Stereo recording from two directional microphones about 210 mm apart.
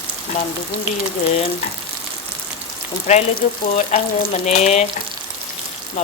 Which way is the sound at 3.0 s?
35° left (ahead or behind).